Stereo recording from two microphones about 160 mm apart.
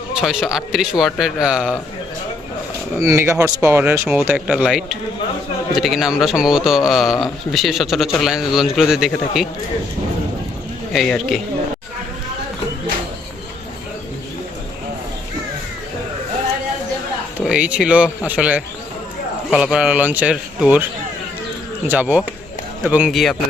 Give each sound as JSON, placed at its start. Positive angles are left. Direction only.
{"t": 0.1, "sound": "a man's voice", "side_deg": 0}
{"t": 3.0, "sound": "a man's voice", "side_deg": -20}
{"t": 10.9, "sound": "a man's voice", "side_deg": 0}
{"t": 17.4, "sound": "speech", "side_deg": -5}
{"t": 21.8, "sound": "a man's voice", "side_deg": -10}